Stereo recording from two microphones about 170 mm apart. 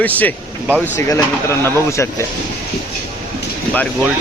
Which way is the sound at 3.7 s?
5° left (ahead or behind).